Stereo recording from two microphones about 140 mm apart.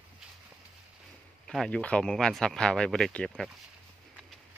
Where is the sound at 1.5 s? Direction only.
5° left (ahead or behind).